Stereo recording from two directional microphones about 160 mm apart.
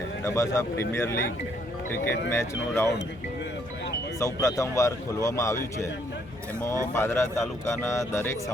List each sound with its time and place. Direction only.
0.3 s speech: 20° left (ahead or behind)
2.3 s speech: 15° left (ahead or behind)
4.2 s speech: 20° left (ahead or behind)